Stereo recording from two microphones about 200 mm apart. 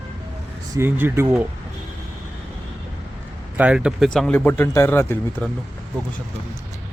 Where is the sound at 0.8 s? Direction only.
10° right (ahead or behind).